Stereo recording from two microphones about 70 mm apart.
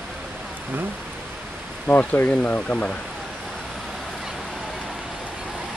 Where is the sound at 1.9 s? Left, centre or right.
Left.